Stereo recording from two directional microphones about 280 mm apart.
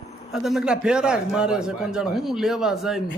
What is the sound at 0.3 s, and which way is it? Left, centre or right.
A man's voice, centre.